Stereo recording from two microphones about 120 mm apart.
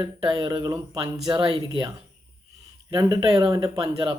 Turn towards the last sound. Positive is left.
turn(degrees=-35)  # may be behind; listen again after turning